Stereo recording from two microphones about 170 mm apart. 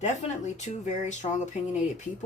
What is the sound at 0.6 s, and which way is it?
Speech, 45° left (ahead or behind).